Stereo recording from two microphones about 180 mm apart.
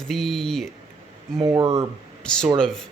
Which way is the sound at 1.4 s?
20° right (ahead or behind).